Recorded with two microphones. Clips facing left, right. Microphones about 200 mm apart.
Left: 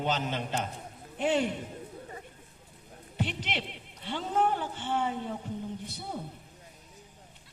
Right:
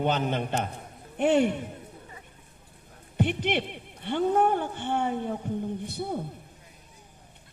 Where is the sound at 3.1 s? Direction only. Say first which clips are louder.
Right 8 dB; 55° right (ahead or behind).